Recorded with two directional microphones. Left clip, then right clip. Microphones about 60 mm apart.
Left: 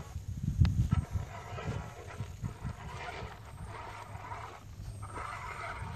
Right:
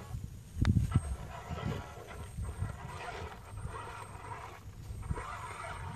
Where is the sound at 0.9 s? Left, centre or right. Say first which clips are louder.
Even; right.